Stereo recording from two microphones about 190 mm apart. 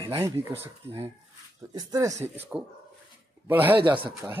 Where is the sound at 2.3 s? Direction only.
10° right (ahead or behind).